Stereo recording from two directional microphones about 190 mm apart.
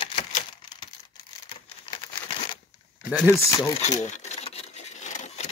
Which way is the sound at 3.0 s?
5° right (ahead or behind).